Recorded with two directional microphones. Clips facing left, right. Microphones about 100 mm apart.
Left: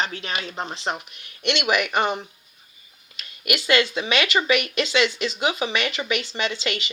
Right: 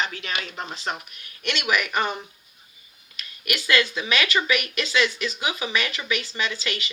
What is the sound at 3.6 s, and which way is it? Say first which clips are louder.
Speech: left 2 dB; 30° left (ahead or behind).